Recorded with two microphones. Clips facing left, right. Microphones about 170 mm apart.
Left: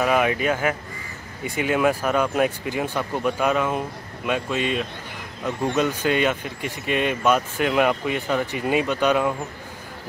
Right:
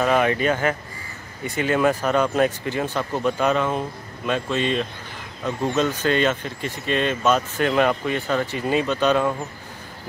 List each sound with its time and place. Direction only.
0.0 s speech: 5° left (ahead or behind)